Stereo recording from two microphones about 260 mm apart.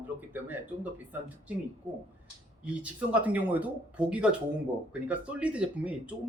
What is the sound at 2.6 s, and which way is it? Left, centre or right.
Speech, centre.